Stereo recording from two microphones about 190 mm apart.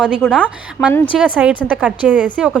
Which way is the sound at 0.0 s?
5° right (ahead or behind).